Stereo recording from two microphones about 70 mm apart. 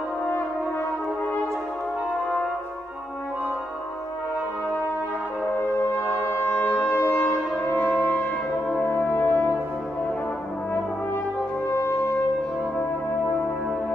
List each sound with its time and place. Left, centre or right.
6.2 s brass instrument: left
6.8 s wind instrument: left
8.8 s french horn: left